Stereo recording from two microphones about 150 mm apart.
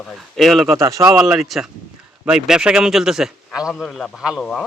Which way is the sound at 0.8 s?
20° right (ahead or behind).